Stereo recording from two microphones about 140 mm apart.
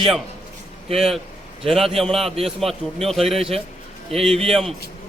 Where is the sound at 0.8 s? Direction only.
45° right (ahead or behind).